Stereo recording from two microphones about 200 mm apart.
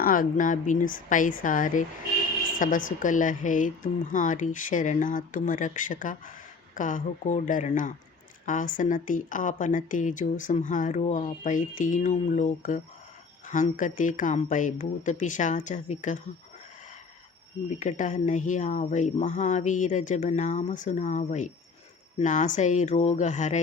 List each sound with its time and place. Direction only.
0.0 s a woman's voice: 45° left (ahead or behind)
17.7 s a woman's voice: 40° left (ahead or behind)